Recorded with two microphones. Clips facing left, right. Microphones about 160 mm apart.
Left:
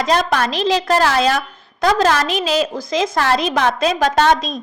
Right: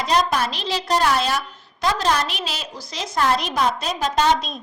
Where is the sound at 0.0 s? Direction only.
70° left (ahead or behind).